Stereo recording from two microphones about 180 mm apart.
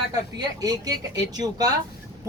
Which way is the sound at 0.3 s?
20° right (ahead or behind).